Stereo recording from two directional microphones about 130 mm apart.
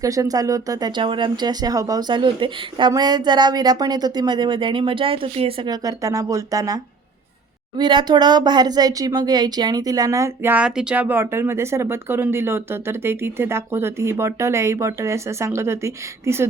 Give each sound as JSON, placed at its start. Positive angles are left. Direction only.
{"t": 0.0, "sound": "speech", "side_deg": -25}
{"t": 5.6, "sound": "speech", "side_deg": -30}
{"t": 7.8, "sound": "speech", "side_deg": -35}